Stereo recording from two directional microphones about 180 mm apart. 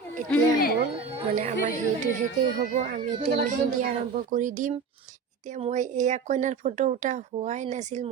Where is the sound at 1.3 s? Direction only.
45° right (ahead or behind).